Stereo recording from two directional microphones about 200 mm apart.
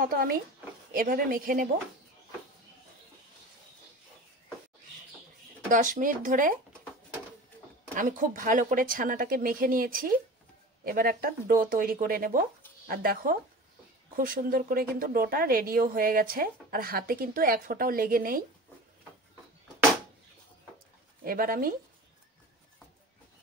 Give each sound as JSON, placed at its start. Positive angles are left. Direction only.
{"t": 0.0, "sound": "a woman's voice", "side_deg": -45}
{"t": 5.7, "sound": "speech", "side_deg": -40}
{"t": 7.9, "sound": "a woman's voice", "side_deg": -40}
{"t": 21.2, "sound": "a woman's voice", "side_deg": -45}